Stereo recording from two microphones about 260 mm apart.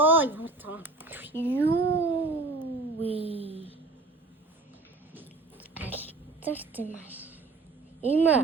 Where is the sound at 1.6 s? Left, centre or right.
Centre.